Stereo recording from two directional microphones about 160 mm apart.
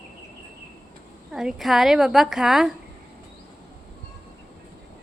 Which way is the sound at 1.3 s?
5° right (ahead or behind).